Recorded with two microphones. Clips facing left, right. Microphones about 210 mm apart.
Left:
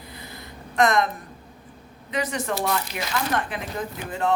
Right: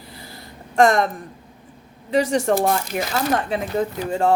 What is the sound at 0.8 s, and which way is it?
Speech, 30° right (ahead or behind).